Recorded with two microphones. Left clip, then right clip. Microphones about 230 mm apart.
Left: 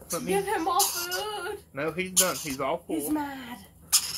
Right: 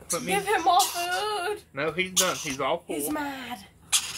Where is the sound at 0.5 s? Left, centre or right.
Right.